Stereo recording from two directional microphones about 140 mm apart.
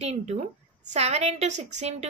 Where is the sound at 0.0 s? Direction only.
50° right (ahead or behind).